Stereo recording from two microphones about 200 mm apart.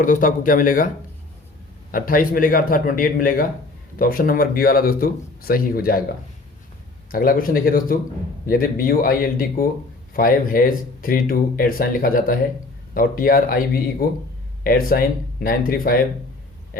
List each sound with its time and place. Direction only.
0.0 s speech: 45° left (ahead or behind)
1.9 s speech: 45° left (ahead or behind)
7.1 s speech: 45° left (ahead or behind)